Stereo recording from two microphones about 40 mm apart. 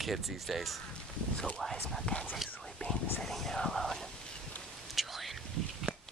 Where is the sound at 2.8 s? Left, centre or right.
Left.